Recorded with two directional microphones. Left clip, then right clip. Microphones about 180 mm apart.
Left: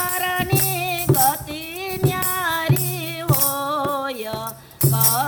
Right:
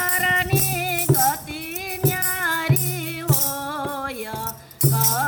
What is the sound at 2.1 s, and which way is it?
Music, 20° left (ahead or behind).